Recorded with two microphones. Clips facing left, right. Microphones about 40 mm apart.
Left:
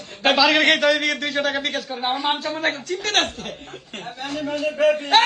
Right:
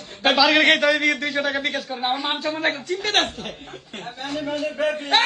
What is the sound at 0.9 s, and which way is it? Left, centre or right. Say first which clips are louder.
Speech: right 1 dB; centre.